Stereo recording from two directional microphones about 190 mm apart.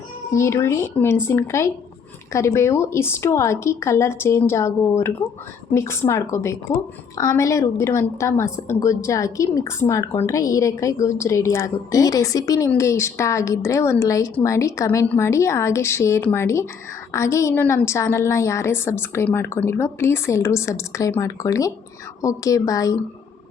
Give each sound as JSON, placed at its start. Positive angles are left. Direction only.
{"t": 0.3, "sound": "a woman's voice", "side_deg": 15}